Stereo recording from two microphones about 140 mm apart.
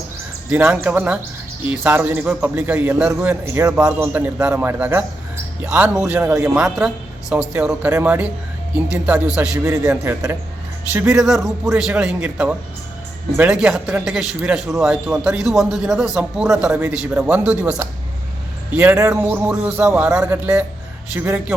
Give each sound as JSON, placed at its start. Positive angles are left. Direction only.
{"t": 0.5, "sound": "a man's voice", "side_deg": -10}
{"t": 3.7, "sound": "a man's voice", "side_deg": -5}
{"t": 10.0, "sound": "a man's voice", "side_deg": -20}
{"t": 11.1, "sound": "a man's voice", "side_deg": -5}